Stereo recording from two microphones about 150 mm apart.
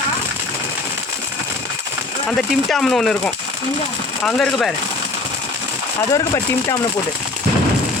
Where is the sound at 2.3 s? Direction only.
Centre (ahead or behind).